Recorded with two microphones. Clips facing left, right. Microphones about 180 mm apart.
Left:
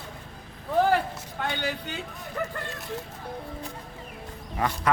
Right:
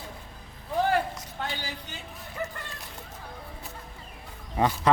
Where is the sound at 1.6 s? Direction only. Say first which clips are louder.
Left 8 dB; 65° left (ahead or behind).